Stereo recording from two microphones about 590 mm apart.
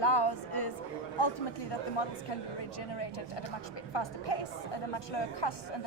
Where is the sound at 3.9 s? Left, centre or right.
Left.